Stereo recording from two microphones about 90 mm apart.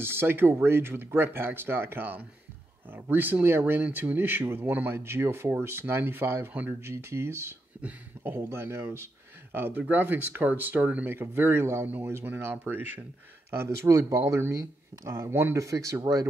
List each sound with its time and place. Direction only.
0.0 s speech: 25° right (ahead or behind); by 16.3 s 40° right (ahead or behind)